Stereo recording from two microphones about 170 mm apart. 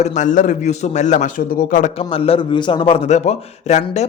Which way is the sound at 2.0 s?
35° left (ahead or behind).